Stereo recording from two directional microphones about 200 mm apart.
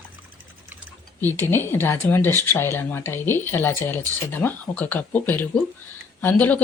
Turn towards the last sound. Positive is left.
turn(degrees=10)  # may be behind; listen again after turning